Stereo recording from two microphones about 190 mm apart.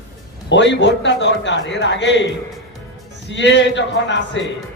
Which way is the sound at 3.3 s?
70° left (ahead or behind).